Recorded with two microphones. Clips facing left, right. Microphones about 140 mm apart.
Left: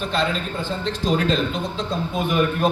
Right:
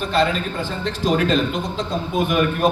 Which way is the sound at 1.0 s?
50° right (ahead or behind).